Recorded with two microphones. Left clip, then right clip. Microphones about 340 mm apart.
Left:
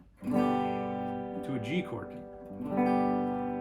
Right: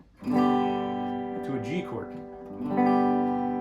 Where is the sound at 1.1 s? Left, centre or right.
Right.